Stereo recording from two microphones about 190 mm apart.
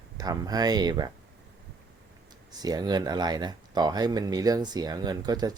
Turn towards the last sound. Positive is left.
turn(degrees=-20)  # may be behind; listen again after turning